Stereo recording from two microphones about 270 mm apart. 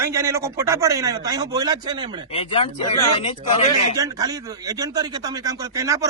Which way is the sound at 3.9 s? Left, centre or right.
Centre.